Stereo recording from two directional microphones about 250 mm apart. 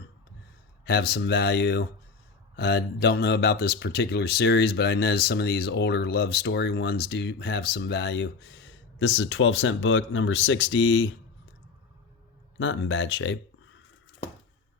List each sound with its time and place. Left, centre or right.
0.9 s speech: left
12.5 s speech: left